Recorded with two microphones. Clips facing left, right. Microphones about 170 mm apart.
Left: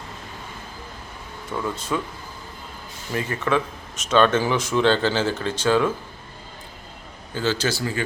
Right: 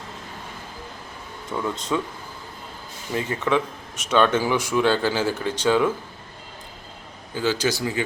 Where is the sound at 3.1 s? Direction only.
15° right (ahead or behind).